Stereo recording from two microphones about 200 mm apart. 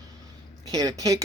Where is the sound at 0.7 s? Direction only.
15° right (ahead or behind).